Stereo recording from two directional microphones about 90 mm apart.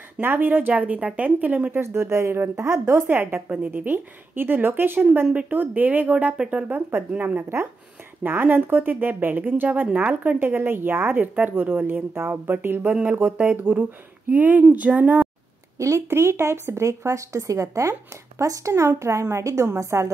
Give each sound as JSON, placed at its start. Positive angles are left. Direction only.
{"t": 0.2, "sound": "speech", "side_deg": -20}
{"t": 6.9, "sound": "speech", "side_deg": -25}
{"t": 15.8, "sound": "speech", "side_deg": -30}